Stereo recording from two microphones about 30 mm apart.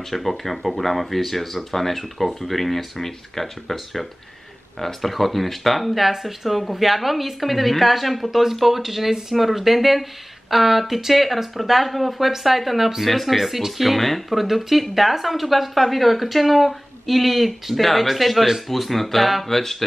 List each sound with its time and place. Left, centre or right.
0.1 s speech: centre
19.4 s music: centre